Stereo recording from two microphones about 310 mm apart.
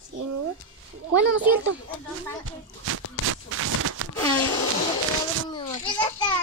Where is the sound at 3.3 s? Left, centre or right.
Right.